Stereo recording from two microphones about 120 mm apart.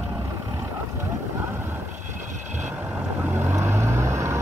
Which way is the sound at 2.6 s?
15° right (ahead or behind).